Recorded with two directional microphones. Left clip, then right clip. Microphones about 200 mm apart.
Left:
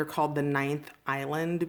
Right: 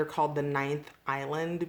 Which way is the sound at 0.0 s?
40° left (ahead or behind).